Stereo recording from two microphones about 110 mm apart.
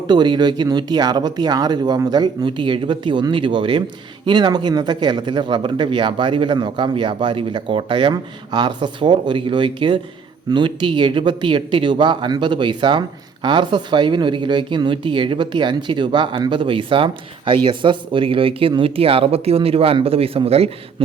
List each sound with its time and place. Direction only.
0.1 s speech: 40° right (ahead or behind); by 20.7 s 65° right (ahead or behind)